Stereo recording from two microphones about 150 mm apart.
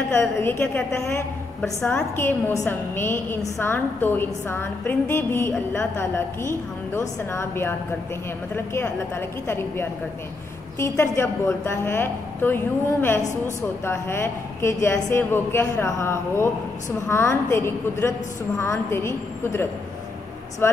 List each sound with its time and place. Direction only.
0.1 s a woman's voice: 15° left (ahead or behind)